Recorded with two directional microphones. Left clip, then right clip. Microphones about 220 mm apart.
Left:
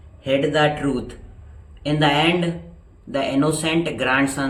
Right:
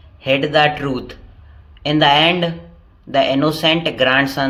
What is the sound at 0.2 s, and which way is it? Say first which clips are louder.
A man's voice: right 4 dB; 45° right (ahead or behind).